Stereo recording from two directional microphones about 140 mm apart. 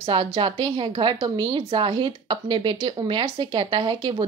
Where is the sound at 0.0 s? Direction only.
35° right (ahead or behind).